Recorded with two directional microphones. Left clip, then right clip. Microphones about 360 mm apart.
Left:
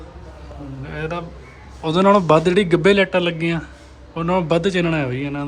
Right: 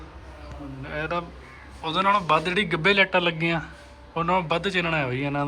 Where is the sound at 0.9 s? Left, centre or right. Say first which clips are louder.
Left 1 dB; centre.